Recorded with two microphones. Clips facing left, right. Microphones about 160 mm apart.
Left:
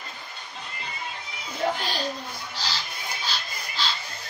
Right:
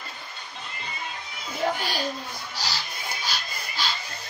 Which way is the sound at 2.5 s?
10° right (ahead or behind).